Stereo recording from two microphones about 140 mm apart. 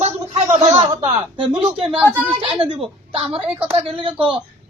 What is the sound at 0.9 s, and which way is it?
A woman's voice, 35° right (ahead or behind).